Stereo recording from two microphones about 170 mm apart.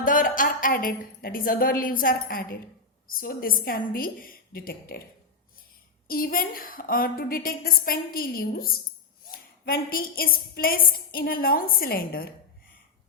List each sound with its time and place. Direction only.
0.0 s a woman's voice: 55° left (ahead or behind)
6.1 s a woman's voice: 60° left (ahead or behind)